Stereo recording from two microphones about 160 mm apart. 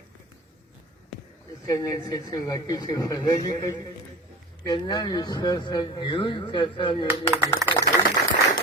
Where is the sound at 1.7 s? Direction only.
20° left (ahead or behind).